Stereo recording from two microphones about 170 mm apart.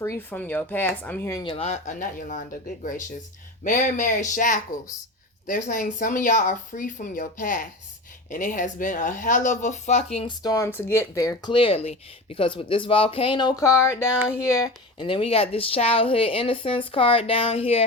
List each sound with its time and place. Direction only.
0.0 s speech: 15° left (ahead or behind)
1.6 s speech: 45° left (ahead or behind)
10.4 s speech: 20° left (ahead or behind)
14.9 s speech: 30° left (ahead or behind)